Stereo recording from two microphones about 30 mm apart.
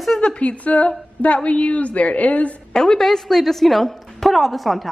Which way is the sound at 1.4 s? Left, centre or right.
Left.